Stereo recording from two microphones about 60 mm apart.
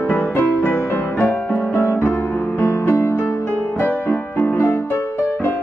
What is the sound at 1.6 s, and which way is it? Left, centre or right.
Music, left.